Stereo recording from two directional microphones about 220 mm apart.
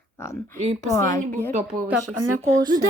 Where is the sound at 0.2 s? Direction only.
10° left (ahead or behind).